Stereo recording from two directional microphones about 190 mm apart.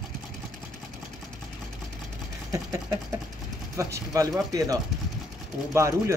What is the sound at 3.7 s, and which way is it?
Speech, 15° right (ahead or behind).